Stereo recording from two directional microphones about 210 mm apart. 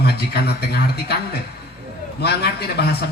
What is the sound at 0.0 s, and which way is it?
A man's voice, 50° left (ahead or behind).